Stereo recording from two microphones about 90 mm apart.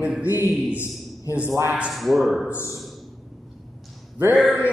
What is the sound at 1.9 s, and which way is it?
Speech, centre (ahead or behind).